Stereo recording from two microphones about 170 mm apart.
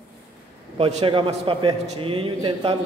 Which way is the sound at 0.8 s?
30° right (ahead or behind).